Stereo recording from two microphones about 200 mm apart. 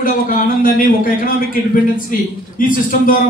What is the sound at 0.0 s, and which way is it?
Speech, 45° left (ahead or behind).